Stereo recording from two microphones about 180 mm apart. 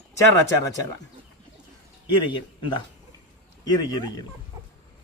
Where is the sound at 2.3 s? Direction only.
25° left (ahead or behind).